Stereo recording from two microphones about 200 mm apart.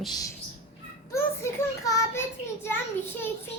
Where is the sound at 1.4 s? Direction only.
15° left (ahead or behind).